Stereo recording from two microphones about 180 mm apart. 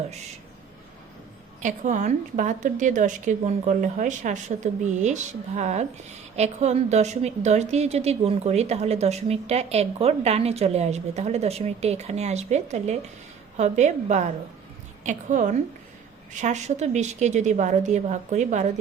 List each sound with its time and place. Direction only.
1.6 s a woman's voice: 45° right (ahead or behind)